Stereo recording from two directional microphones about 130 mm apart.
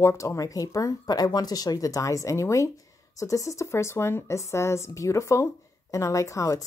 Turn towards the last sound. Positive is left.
turn(degrees=25)  # may be behind; listen again after turning